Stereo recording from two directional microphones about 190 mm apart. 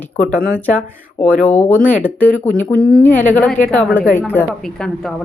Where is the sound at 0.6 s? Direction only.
10° left (ahead or behind).